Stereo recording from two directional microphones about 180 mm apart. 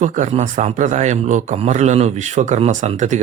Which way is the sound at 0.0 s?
40° right (ahead or behind).